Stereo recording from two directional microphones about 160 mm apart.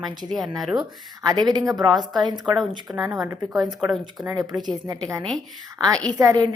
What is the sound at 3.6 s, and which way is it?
Speech, centre (ahead or behind).